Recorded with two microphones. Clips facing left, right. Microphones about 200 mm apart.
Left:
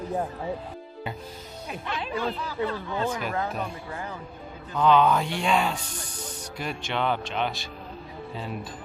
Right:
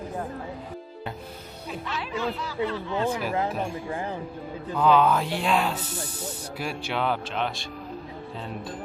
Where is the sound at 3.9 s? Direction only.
30° right (ahead or behind).